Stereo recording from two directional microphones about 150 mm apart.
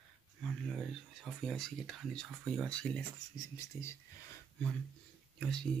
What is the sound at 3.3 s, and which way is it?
Speech, 20° left (ahead or behind).